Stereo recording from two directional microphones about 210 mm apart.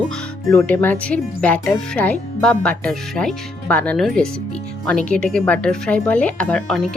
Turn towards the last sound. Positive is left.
turn(degrees=5)  # may be behind; listen again after turning